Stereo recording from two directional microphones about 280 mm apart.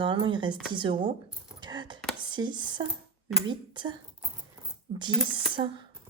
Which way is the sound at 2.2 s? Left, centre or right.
Centre.